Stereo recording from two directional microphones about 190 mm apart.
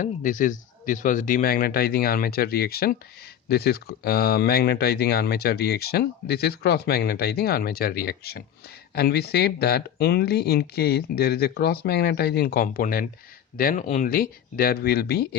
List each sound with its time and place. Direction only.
0.0 s a man's voice: 45° left (ahead or behind)